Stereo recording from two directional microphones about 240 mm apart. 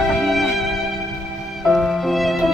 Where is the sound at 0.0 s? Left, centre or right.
Centre.